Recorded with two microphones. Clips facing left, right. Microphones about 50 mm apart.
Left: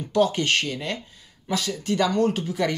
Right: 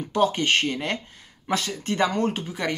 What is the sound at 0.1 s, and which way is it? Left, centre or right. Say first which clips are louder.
Speech: even; right.